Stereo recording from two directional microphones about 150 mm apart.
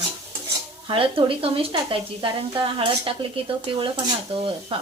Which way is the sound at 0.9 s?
35° right (ahead or behind).